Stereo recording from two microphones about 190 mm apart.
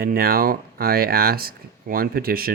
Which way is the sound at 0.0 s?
50° right (ahead or behind).